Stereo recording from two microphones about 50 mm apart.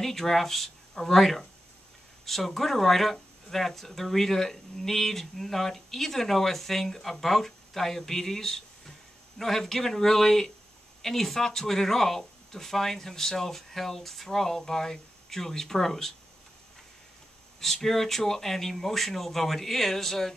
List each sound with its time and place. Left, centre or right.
0.0 s speech: centre
17.8 s speech: centre